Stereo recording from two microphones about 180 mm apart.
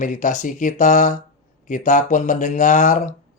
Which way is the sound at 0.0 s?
45° left (ahead or behind).